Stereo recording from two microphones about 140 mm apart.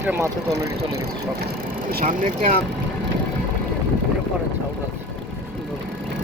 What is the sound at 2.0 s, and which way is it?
Speech, 70° right (ahead or behind).